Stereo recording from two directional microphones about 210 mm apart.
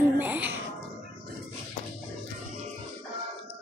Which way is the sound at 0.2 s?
10° right (ahead or behind).